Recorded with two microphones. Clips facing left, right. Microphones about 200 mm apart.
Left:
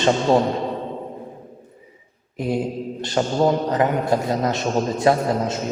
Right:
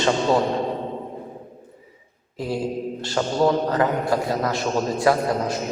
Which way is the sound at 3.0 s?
20° left (ahead or behind).